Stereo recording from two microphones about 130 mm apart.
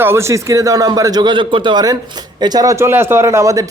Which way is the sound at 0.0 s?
20° right (ahead or behind).